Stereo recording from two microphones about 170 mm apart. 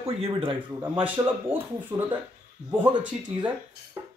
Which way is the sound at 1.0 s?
10° right (ahead or behind).